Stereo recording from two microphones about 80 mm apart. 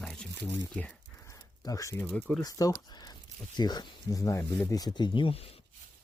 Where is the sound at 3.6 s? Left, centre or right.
Left.